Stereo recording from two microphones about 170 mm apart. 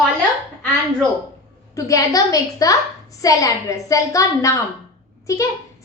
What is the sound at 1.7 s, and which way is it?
A woman's voice, 20° left (ahead or behind).